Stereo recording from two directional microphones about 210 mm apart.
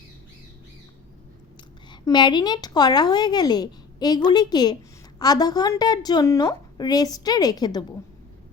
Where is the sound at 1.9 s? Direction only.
20° left (ahead or behind).